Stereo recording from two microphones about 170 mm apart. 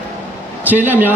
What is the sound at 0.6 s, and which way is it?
Speech, 10° right (ahead or behind).